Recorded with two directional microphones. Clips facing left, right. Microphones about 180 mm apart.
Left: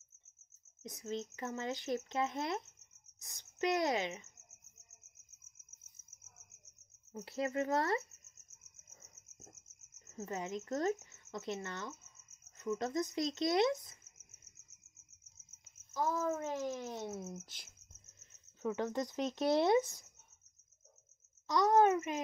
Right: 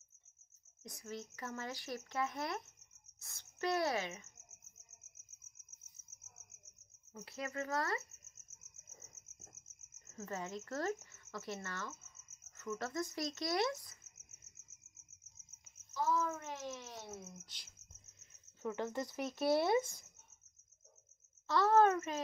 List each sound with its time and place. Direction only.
0.8 s speech: 20° left (ahead or behind)
7.2 s speech: 30° left (ahead or behind)
9.9 s speech: 15° left (ahead or behind)
15.9 s a sound: 45° left (ahead or behind)
17.2 s a sound: 50° left (ahead or behind)
18.6 s speech: 15° left (ahead or behind)
21.5 s speech: 15° left (ahead or behind)